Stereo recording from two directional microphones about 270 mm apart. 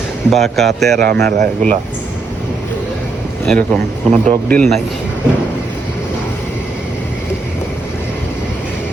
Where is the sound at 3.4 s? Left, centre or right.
Centre.